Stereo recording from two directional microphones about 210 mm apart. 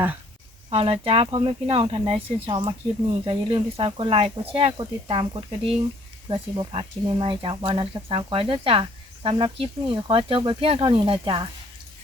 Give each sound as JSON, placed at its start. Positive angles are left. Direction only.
{"t": 0.7, "sound": "speech", "side_deg": -25}